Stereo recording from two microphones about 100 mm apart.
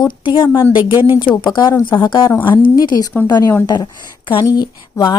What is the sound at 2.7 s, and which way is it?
Speech, 40° left (ahead or behind).